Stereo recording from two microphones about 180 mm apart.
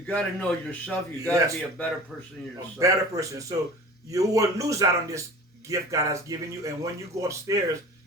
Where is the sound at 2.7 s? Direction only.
20° right (ahead or behind).